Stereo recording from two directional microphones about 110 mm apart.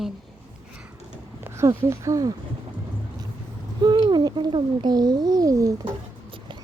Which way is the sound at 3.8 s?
40° right (ahead or behind).